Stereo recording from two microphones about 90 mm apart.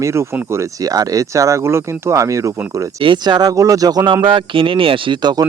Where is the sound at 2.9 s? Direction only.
65° right (ahead or behind); by 4.1 s 40° right (ahead or behind).